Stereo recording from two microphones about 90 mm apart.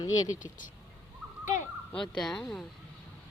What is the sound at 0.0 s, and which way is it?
Speech, 40° left (ahead or behind).